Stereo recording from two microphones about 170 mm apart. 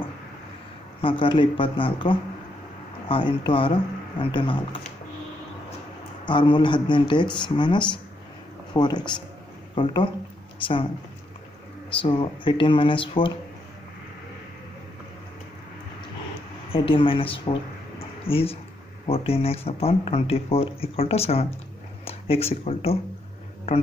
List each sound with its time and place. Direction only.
1.0 s speech: 30° left (ahead or behind)
6.2 s speech: 30° left (ahead or behind)
10.6 s speech: 30° left (ahead or behind)
11.9 s speech: 30° left (ahead or behind)
16.7 s speech: 30° left (ahead or behind)